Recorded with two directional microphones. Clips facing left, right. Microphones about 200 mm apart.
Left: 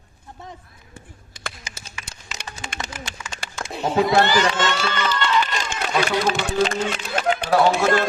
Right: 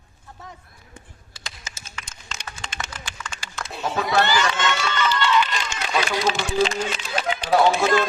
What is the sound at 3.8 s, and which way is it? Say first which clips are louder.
Speech: left 4 dB; 30° left (ahead or behind).